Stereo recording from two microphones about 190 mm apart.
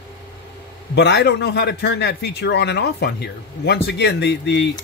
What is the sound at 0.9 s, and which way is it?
A man's voice, 65° left (ahead or behind).